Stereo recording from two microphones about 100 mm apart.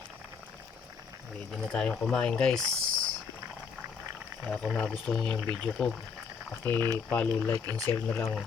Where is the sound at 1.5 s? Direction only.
10° left (ahead or behind).